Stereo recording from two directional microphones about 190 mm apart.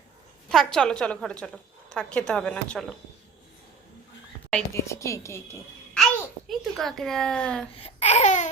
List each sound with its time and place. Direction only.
0.4 s speech: 5° left (ahead or behind)
4.5 s a woman's voice: 15° left (ahead or behind)
6.5 s speech: centre (ahead or behind)
7.8 s a sound: 35° left (ahead or behind)